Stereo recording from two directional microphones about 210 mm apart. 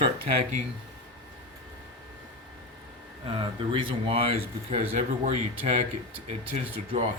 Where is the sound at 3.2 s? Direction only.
25° right (ahead or behind).